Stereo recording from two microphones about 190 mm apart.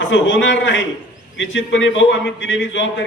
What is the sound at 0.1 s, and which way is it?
A man's voice, 75° left (ahead or behind).